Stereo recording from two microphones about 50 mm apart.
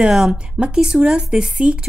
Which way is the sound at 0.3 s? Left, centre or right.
Centre.